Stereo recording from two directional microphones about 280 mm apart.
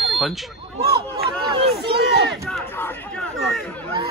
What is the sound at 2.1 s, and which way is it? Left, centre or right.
Speech, right.